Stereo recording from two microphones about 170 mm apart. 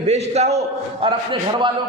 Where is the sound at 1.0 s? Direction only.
30° right (ahead or behind).